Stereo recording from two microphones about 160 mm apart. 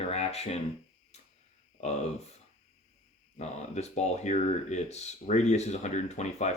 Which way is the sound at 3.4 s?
45° left (ahead or behind).